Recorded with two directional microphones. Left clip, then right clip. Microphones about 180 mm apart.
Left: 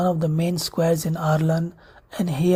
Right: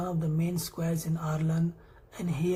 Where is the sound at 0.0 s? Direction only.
45° left (ahead or behind).